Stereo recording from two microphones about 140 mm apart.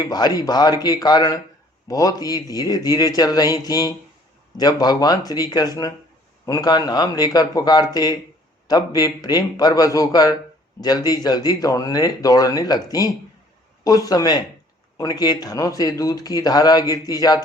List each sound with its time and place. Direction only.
0.0 s speech: 30° left (ahead or behind)